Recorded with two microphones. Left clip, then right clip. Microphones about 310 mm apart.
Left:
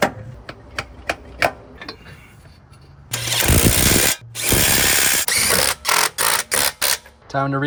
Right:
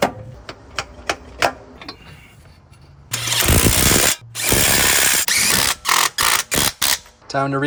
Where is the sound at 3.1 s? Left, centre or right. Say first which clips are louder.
Right 1 dB; centre.